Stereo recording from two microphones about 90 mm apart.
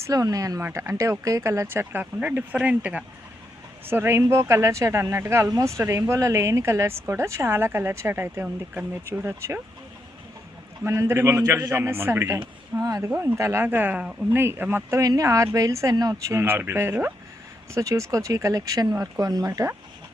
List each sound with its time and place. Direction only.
0.1 s speech: 40° right (ahead or behind); by 3.0 s 15° right (ahead or behind)
3.8 s speech: 25° right (ahead or behind)
10.8 s speech: 35° right (ahead or behind)
12.8 s speech: 40° right (ahead or behind)
13.1 s speech: 25° right (ahead or behind); by 16.2 s 45° right (ahead or behind)
16.3 s speech: 25° right (ahead or behind)
17.7 s speech: 35° right (ahead or behind)